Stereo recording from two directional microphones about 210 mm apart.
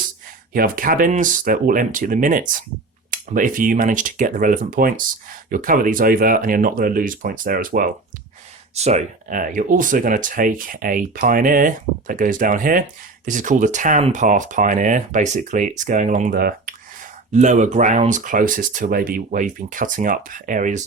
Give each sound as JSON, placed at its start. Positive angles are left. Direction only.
{"t": 0.5, "sound": "speech", "side_deg": -40}
{"t": 8.7, "sound": "speech", "side_deg": -30}